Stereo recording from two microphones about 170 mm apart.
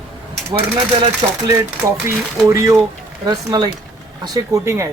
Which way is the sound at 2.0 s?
20° right (ahead or behind).